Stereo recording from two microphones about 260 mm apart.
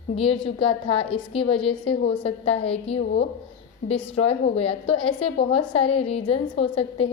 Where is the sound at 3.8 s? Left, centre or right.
Left.